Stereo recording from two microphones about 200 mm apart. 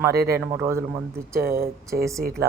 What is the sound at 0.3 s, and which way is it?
A woman's voice, 15° right (ahead or behind).